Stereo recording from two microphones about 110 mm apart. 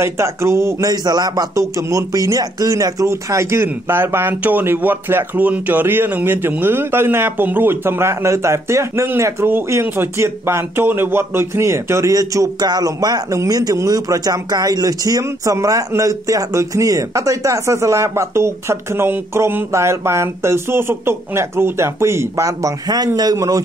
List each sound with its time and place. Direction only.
0.0 s speech: 25° right (ahead or behind)